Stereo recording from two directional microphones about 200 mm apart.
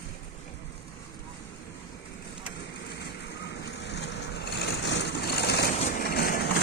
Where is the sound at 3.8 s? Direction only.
60° left (ahead or behind).